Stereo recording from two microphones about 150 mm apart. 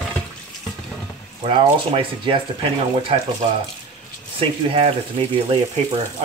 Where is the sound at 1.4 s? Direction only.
35° right (ahead or behind).